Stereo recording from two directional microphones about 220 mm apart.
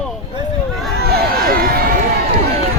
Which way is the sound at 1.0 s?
45° right (ahead or behind).